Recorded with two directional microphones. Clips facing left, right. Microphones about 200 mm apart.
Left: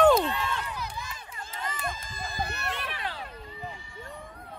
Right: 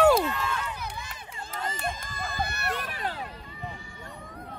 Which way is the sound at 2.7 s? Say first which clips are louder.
Right 3 dB; 45° right (ahead or behind).